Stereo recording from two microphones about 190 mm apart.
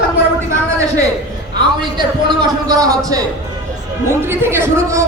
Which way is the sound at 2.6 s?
20° right (ahead or behind).